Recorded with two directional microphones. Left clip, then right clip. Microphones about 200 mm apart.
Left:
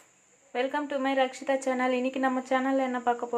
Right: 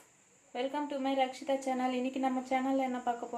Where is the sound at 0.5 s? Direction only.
20° left (ahead or behind).